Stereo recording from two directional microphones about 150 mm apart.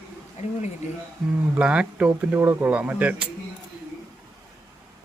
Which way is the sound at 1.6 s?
10° right (ahead or behind).